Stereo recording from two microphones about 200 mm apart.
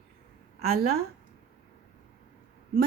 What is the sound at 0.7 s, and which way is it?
Speech, 50° right (ahead or behind).